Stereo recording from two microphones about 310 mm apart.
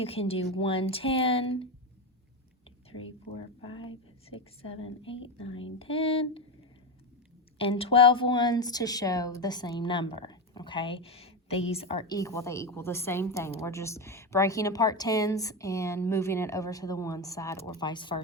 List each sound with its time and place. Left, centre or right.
0.0 s speech: centre
3.7 s speech: centre
7.6 s speech: centre